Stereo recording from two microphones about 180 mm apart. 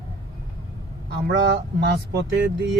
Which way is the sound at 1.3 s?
75° right (ahead or behind).